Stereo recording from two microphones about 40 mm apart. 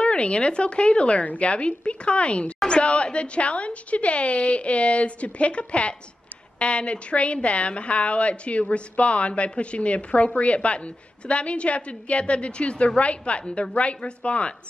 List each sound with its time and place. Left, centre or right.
0.0 s a woman's voice: left